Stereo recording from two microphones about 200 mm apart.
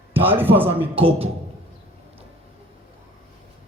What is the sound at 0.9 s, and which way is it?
Speech, 30° right (ahead or behind).